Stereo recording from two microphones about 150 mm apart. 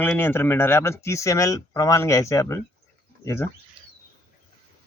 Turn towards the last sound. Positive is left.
turn(degrees=20)  # may be behind; listen again after turning